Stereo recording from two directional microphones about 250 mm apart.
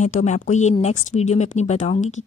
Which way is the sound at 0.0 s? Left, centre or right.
Left.